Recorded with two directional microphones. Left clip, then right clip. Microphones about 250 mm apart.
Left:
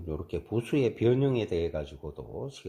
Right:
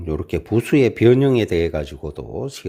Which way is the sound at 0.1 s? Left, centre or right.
Right.